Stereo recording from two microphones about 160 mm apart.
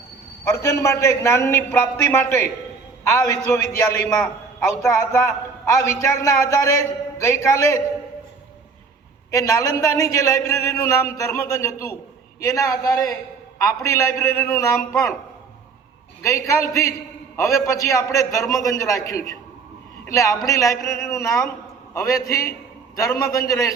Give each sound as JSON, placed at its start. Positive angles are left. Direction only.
{"t": 0.5, "sound": "a man's voice", "side_deg": 20}
{"t": 9.3, "sound": "a man's voice", "side_deg": 20}
{"t": 16.2, "sound": "a man's voice", "side_deg": 20}